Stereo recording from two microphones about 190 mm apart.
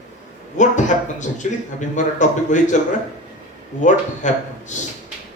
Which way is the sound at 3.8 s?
40° left (ahead or behind).